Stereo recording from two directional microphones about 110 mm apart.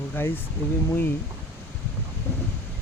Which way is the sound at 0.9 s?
20° left (ahead or behind).